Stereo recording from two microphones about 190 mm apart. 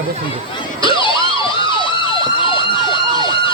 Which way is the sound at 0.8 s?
25° left (ahead or behind).